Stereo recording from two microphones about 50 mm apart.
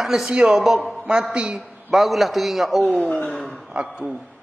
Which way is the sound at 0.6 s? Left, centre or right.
Centre.